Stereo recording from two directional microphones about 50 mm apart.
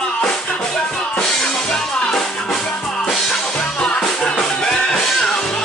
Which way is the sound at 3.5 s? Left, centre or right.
Left.